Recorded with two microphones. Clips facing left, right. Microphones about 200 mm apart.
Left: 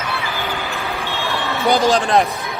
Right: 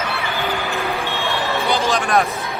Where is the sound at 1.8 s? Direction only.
30° left (ahead or behind).